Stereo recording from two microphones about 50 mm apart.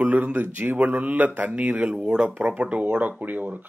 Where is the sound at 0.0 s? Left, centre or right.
Right.